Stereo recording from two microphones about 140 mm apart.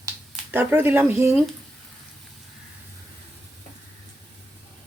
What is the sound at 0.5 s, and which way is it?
Speech, 15° right (ahead or behind).